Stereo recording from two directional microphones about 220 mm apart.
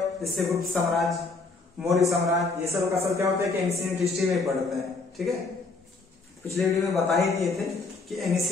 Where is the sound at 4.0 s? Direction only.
Centre (ahead or behind).